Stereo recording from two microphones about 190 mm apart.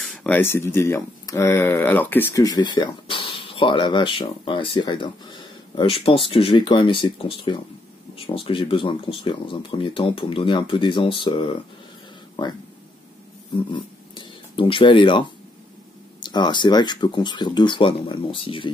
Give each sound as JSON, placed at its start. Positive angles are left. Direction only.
{"t": 0.0, "sound": "speech", "side_deg": 5}
{"t": 13.6, "sound": "speech", "side_deg": 25}